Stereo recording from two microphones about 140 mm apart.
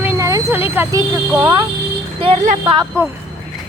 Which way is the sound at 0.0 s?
20° right (ahead or behind).